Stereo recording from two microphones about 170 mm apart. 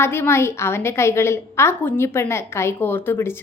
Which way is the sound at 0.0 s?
15° left (ahead or behind).